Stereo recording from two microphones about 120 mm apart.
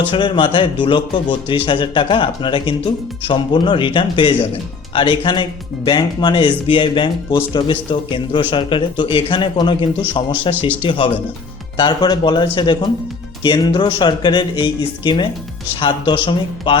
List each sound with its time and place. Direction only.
0.1 s speech: 45° left (ahead or behind)